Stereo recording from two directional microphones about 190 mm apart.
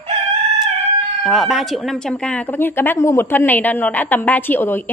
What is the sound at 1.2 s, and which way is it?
A woman's voice, centre (ahead or behind).